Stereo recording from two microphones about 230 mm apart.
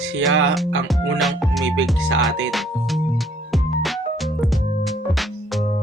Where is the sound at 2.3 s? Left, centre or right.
Right.